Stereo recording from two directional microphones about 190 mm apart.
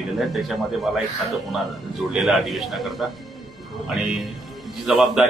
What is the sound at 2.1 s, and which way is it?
A man's voice, centre (ahead or behind).